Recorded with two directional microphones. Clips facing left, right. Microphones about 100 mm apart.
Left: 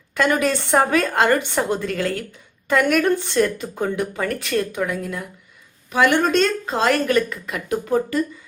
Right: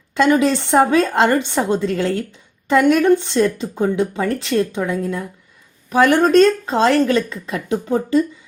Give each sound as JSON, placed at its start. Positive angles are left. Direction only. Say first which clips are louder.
{"t": 0.1, "sound": "speech", "louder": "right 5 dB", "side_deg": -20}